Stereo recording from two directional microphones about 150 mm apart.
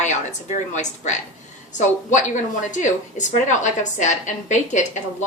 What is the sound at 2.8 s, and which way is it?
A woman's voice, 55° left (ahead or behind).